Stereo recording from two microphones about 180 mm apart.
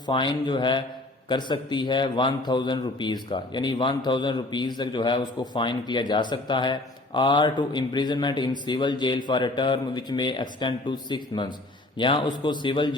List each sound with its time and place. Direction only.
0.0 s a man's voice: 25° left (ahead or behind)